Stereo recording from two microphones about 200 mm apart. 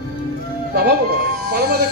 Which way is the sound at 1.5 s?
55° right (ahead or behind).